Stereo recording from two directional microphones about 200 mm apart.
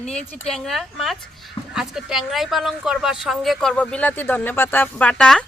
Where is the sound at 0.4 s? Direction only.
Centre (ahead or behind).